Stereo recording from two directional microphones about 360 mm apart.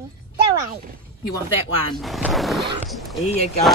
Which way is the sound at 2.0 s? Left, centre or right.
Centre.